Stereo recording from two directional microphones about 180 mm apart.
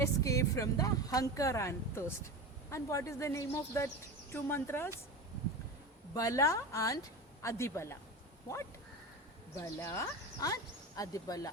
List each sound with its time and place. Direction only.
0.0 s a woman's voice: 15° left (ahead or behind)
6.1 s a woman's voice: 20° left (ahead or behind)
9.6 s speech: 15° left (ahead or behind)